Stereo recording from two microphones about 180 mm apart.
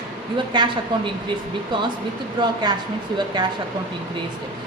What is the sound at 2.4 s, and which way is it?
Speech, 25° right (ahead or behind).